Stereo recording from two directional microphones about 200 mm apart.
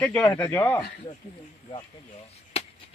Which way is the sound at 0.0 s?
5° left (ahead or behind).